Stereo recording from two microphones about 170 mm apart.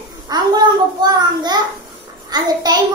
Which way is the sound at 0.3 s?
25° right (ahead or behind).